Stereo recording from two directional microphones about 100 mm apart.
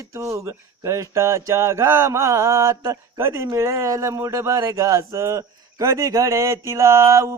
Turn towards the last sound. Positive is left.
turn(degrees=-30)  # may be behind; listen again after turning